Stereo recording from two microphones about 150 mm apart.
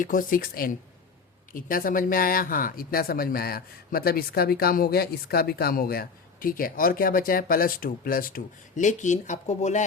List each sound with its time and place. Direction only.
0.0 s speech: 65° left (ahead or behind); by 9.8 s 50° left (ahead or behind)